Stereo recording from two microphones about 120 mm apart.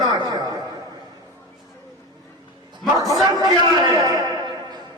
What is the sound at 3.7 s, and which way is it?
Speech, 35° right (ahead or behind).